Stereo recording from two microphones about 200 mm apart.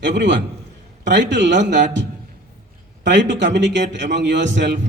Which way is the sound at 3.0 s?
60° right (ahead or behind).